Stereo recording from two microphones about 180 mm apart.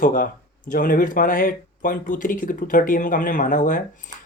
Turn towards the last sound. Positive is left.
turn(degrees=45)  # may be behind; listen again after turning